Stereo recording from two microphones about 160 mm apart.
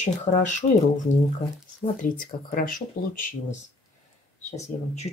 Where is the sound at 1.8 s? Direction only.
60° left (ahead or behind).